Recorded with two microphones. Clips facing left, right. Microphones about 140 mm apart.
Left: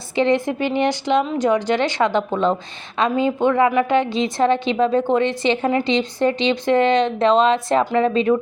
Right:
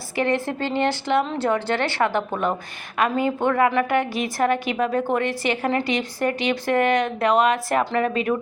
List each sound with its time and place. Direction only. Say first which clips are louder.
0.2 s a woman's voice: left 5 dB; 15° left (ahead or behind)